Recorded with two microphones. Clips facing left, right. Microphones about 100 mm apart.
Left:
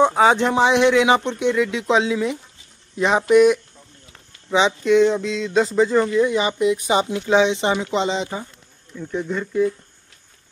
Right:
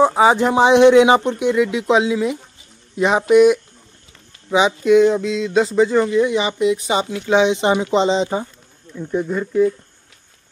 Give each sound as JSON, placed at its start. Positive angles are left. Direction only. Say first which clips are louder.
{"t": 0.0, "sound": "speech", "louder": "right 2 dB", "side_deg": -5}
{"t": 7.9, "sound": "speech", "louder": "right 5 dB", "side_deg": -25}
{"t": 8.9, "sound": "speech", "louder": "right 4 dB", "side_deg": -15}